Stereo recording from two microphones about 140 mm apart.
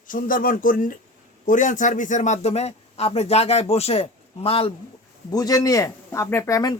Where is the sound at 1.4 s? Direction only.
65° left (ahead or behind); by 4.7 s 40° left (ahead or behind).